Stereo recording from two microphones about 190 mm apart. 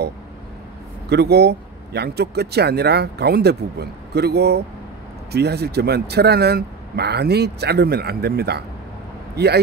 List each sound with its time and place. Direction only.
1.0 s speech: 60° right (ahead or behind)